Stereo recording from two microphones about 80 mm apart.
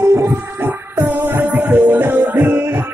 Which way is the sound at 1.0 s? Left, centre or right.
Right.